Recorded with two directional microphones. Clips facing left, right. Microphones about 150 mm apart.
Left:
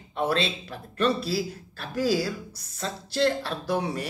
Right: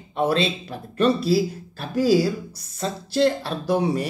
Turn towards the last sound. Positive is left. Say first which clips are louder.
# right 6 dB
turn(degrees=-15)  # may be behind; listen again after turning